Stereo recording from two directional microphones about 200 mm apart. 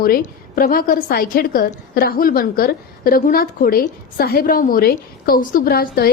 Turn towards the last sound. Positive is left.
turn(degrees=50)  # may be behind; listen again after turning